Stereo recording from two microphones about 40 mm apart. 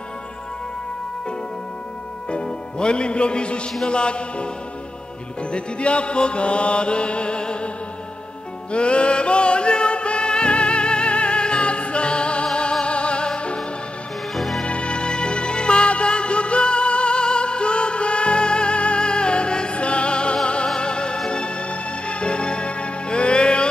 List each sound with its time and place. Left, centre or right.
2.3 s a man's voice: left
3.8 s music: left
5.5 s music: left
8.7 s music: left
14.3 s music: centre
14.6 s music: left